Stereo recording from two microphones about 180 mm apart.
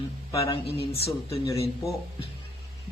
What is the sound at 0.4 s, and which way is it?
Speech, 30° left (ahead or behind).